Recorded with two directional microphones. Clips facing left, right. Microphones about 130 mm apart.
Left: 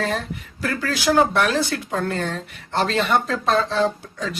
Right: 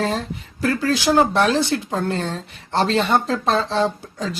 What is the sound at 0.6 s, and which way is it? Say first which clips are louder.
Speech: right 4 dB; 30° right (ahead or behind).